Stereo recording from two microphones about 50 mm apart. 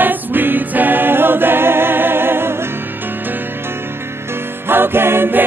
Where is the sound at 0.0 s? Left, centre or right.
Right.